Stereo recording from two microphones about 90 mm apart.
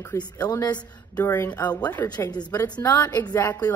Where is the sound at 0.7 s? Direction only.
25° left (ahead or behind).